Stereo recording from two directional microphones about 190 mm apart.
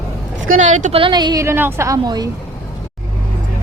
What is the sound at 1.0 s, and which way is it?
A woman's voice, 20° right (ahead or behind).